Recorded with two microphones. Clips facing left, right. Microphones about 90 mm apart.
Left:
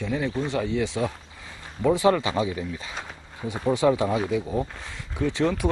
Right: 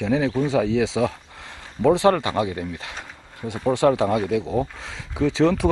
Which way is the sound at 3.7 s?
90° right.